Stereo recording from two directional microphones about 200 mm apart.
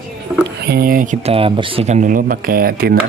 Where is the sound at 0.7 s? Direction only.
45° right (ahead or behind).